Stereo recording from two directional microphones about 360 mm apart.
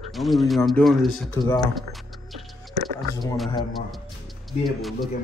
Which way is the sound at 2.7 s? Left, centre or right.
Right.